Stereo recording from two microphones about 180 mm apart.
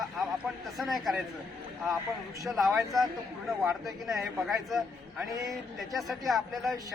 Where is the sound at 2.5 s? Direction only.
Centre (ahead or behind).